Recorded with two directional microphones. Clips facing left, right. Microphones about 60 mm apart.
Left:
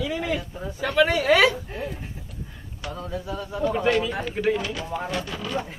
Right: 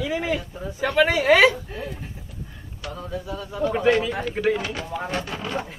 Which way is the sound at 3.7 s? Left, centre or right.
Right.